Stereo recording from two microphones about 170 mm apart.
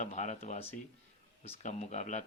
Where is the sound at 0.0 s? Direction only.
45° left (ahead or behind).